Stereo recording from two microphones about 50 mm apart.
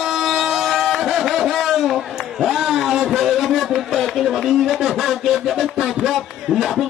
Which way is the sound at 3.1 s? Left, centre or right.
Centre.